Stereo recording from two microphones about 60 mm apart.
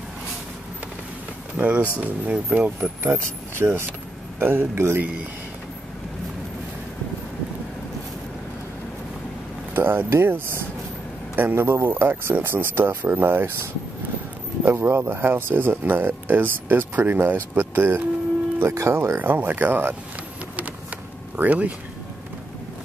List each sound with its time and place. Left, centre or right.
1.6 s speech: right
2.8 s speech: right
9.8 s speech: right
14.6 s speech: right
18.6 s speech: right
19.1 s speech: right
21.4 s speech: right